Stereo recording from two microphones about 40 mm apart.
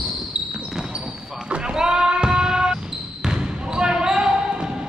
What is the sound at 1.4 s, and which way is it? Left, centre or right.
Basketball bounce, right.